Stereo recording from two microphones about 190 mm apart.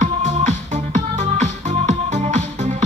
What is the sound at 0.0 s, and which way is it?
Music, 35° right (ahead or behind).